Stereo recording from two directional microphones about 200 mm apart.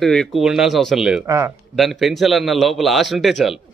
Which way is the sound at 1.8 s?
Centre (ahead or behind).